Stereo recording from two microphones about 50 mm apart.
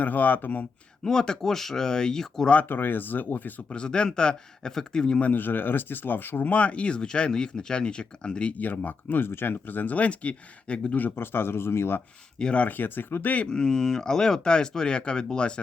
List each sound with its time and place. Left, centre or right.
0.0 s speech: left
1.0 s speech: centre
2.6 s speech: left
3.7 s speech: centre
5.2 s speech: left
11.1 s speech: left
12.4 s speech: centre
12.6 s speech: left
13.5 s speech: centre